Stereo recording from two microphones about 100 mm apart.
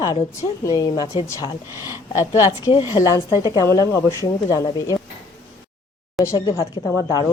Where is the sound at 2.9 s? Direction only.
40° left (ahead or behind).